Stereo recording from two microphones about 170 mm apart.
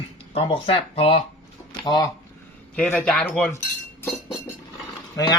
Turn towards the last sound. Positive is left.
turn(degrees=20)  # may be behind; listen again after turning